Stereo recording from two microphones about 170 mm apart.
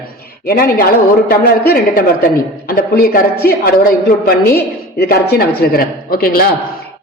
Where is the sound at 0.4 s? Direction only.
60° left (ahead or behind).